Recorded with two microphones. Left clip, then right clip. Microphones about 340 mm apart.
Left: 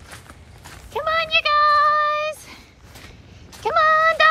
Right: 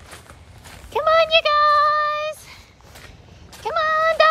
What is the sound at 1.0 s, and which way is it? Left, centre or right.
Child singing, centre.